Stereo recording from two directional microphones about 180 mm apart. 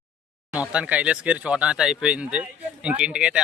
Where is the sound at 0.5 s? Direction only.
5° right (ahead or behind).